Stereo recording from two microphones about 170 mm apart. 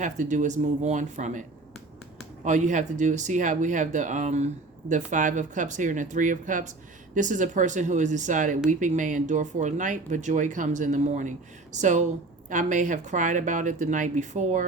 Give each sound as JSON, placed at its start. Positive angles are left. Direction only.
{"t": 0.0, "sound": "speech", "side_deg": -45}